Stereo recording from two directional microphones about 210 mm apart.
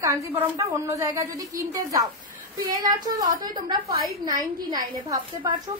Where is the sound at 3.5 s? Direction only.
20° right (ahead or behind).